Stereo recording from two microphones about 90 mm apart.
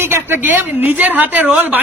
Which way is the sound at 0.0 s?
25° right (ahead or behind).